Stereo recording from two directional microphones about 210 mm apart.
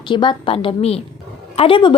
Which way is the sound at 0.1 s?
20° left (ahead or behind).